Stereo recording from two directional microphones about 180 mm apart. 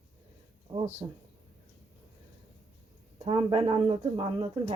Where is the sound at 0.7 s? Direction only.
40° right (ahead or behind).